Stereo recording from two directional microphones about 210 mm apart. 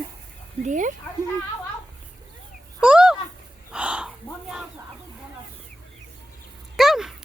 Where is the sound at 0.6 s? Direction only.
35° right (ahead or behind).